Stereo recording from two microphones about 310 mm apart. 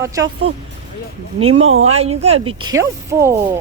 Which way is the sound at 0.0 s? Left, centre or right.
Centre.